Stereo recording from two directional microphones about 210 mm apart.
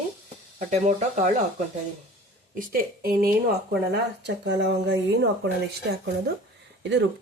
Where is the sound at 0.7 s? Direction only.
35° right (ahead or behind).